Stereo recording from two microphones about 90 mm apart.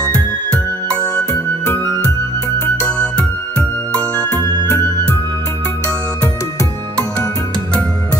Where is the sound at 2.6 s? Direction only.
15° left (ahead or behind).